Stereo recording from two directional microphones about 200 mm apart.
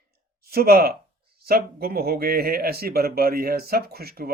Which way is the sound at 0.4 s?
50° right (ahead or behind).